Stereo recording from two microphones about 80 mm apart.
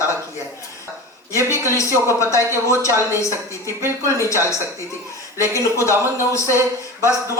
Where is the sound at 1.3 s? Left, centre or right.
Left.